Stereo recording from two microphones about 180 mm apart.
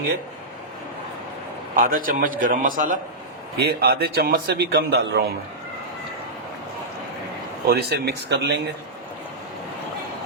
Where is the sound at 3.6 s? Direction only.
60° right (ahead or behind).